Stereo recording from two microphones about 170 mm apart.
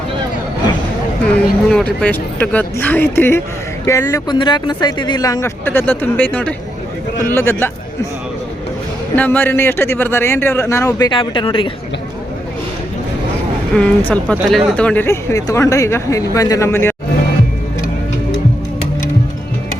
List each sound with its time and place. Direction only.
1.2 s speech: 10° left (ahead or behind)
9.1 s speech: 10° left (ahead or behind); by 11.7 s 30° left (ahead or behind)
13.7 s speech: 10° left (ahead or behind)